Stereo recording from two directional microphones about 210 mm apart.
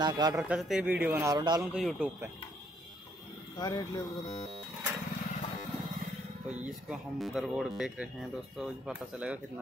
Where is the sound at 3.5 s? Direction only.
20° left (ahead or behind).